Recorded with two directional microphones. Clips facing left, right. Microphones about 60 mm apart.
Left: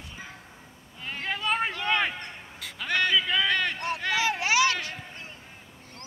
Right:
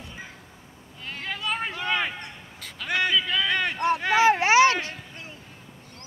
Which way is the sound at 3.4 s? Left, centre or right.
Centre.